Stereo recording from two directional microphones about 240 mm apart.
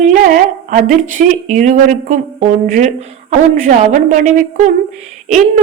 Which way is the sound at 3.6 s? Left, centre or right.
Right.